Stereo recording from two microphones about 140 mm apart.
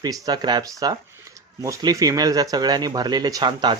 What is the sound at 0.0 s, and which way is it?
Speech, 30° right (ahead or behind).